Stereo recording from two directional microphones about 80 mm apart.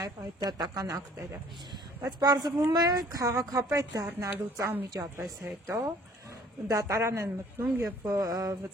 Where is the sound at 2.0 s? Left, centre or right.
Right.